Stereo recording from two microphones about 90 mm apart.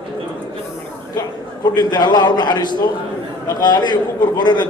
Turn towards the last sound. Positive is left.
turn(degrees=50)  # may be behind; listen again after turning